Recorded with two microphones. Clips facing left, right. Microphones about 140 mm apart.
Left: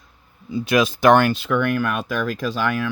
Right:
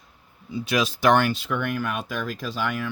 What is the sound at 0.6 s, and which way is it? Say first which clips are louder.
Speech: left 5 dB; 50° left (ahead or behind).